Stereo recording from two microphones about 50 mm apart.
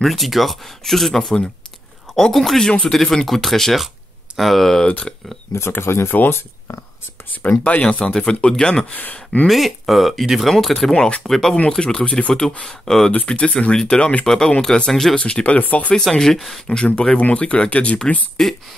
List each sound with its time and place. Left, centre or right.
0.0 s speech: centre
5.1 s speech: left
5.7 s speech: left
7.6 s speech: left
8.0 s speech: centre
8.8 s speech: left
9.5 s speech: centre; by 12.4 s left
12.6 s speech: centre
13.3 s speech: left; by 15.1 s centre
15.1 s speech: left
15.9 s speech: centre
16.7 s speech: centre
18.4 s speech: centre